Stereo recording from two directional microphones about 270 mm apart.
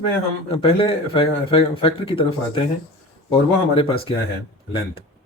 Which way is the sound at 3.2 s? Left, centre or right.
Centre.